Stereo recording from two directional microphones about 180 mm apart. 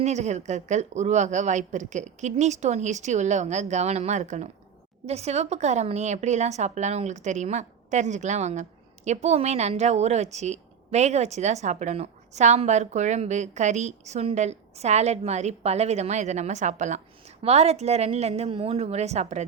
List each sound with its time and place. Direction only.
0.0 s a woman's voice: 40° right (ahead or behind)